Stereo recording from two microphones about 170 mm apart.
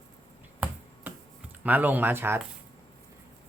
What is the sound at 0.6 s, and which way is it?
Finger snapping, 10° right (ahead or behind).